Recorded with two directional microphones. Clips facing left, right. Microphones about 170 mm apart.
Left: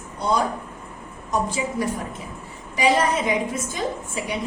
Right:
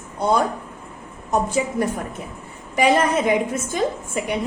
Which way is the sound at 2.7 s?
55° right (ahead or behind).